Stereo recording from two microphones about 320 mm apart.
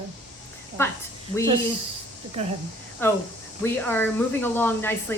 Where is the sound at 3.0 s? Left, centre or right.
Centre.